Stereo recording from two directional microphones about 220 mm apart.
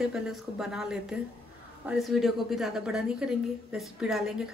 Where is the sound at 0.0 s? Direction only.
Centre (ahead or behind).